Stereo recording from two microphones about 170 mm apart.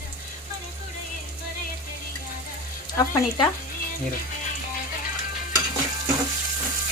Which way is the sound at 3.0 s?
20° left (ahead or behind).